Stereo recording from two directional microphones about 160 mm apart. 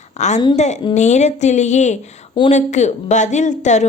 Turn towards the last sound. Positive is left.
turn(degrees=50)  # may be behind; listen again after turning